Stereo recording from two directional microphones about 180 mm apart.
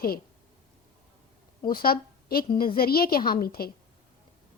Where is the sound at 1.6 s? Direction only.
55° left (ahead or behind).